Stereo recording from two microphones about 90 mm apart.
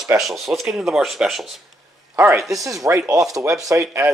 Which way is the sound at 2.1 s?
25° right (ahead or behind).